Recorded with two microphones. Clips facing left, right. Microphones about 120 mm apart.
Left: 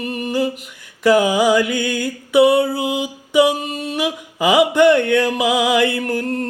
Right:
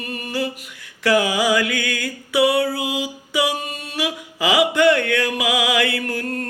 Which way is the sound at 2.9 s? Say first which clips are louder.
Left 4 dB; 20° left (ahead or behind).